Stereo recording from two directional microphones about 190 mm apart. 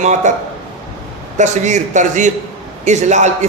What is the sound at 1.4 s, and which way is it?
Speech, 40° right (ahead or behind).